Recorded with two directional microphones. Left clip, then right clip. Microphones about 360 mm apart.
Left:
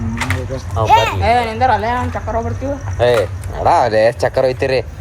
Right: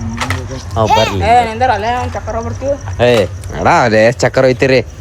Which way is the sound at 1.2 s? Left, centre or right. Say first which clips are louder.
Right 4 dB; right.